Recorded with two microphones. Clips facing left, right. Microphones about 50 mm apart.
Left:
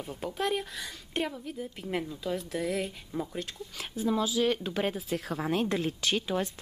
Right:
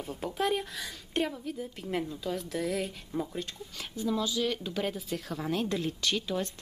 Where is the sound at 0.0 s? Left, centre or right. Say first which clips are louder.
Right 1 dB; centre.